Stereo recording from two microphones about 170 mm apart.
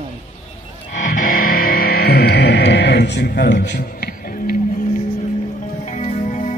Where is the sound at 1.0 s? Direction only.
50° left (ahead or behind).